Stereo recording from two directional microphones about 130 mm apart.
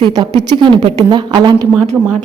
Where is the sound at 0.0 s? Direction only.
35° right (ahead or behind).